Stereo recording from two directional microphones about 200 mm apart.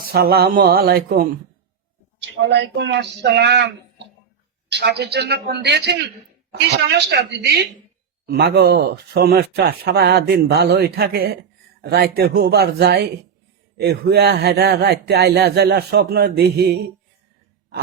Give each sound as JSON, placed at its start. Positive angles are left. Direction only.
{"t": 0.1, "sound": "speech", "side_deg": -50}
{"t": 2.3, "sound": "speech", "side_deg": -65}